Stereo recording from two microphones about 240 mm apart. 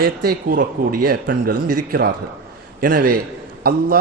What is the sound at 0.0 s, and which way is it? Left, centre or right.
A man's voice, right.